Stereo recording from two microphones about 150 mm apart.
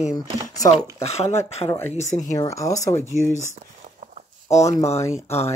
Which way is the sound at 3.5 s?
50° right (ahead or behind).